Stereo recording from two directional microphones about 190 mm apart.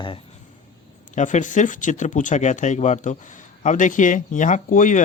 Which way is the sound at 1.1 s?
40° left (ahead or behind).